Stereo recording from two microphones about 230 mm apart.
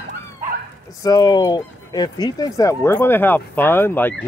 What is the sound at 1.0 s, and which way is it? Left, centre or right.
Speech, centre.